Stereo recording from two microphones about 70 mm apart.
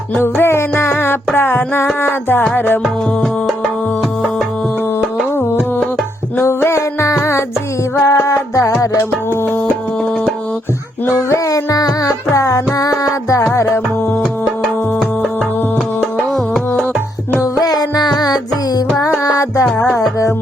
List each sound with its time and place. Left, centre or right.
0.2 s music: left
2.8 s music: centre
6.4 s music: left
11.1 s music: left
13.4 s music: left
17.4 s music: left
19.2 s music: left